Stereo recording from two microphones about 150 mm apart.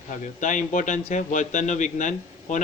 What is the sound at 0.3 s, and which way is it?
A man's voice, 55° left (ahead or behind).